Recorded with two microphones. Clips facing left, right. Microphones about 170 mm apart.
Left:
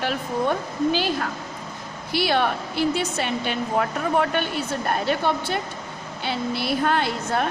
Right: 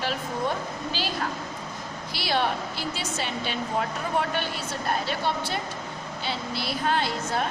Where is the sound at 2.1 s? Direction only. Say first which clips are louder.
Left 5 dB; 55° left (ahead or behind).